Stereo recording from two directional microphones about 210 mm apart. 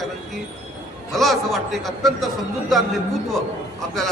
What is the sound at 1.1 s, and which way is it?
A man's voice, centre (ahead or behind).